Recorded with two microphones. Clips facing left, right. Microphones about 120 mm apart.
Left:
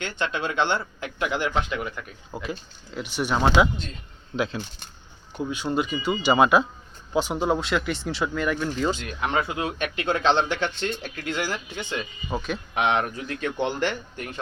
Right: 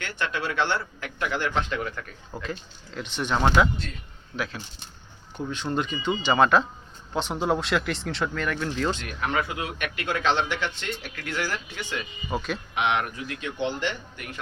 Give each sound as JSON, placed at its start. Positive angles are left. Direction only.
{"t": 0.0, "sound": "speech", "side_deg": 25}
{"t": 4.4, "sound": "speech", "side_deg": 25}
{"t": 5.5, "sound": "speech", "side_deg": 5}
{"t": 9.0, "sound": "speech", "side_deg": 25}
{"t": 12.3, "sound": "speech", "side_deg": 0}
{"t": 12.7, "sound": "speech", "side_deg": 40}